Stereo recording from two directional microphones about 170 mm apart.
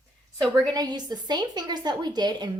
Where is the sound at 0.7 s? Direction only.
25° right (ahead or behind).